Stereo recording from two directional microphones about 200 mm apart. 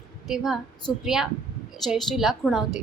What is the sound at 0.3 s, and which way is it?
A woman's voice, centre (ahead or behind).